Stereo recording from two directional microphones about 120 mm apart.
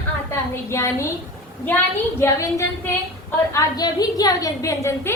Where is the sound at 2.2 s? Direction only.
20° left (ahead or behind).